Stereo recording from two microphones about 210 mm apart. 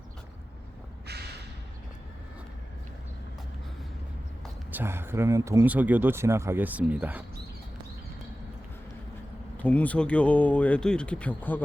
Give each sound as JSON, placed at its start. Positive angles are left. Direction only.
{"t": 1.0, "sound": "a sound", "side_deg": -50}
{"t": 4.7, "sound": "speech", "side_deg": -10}
{"t": 9.6, "sound": "speech", "side_deg": 5}